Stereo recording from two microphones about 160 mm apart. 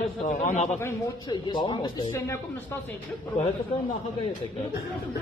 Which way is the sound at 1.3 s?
30° left (ahead or behind).